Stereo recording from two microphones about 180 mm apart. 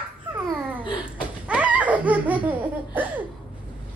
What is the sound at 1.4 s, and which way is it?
Laughter, 5° right (ahead or behind).